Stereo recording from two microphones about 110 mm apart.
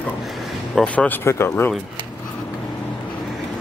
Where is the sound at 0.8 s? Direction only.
15° left (ahead or behind).